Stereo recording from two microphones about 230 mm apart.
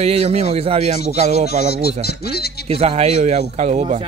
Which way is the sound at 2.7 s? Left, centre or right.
Right.